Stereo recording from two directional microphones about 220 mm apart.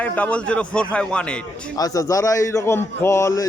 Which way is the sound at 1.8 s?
15° left (ahead or behind).